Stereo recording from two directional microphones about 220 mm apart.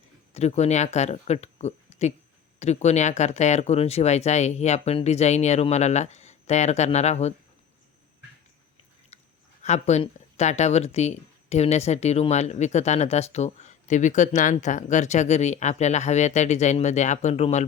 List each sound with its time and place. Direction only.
0.3 s speech: 30° left (ahead or behind)
9.1 s a sound: 30° left (ahead or behind)
9.6 s speech: 30° left (ahead or behind)